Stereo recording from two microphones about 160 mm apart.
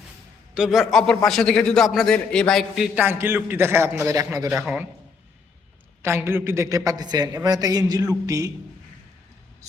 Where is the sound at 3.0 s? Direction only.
15° right (ahead or behind).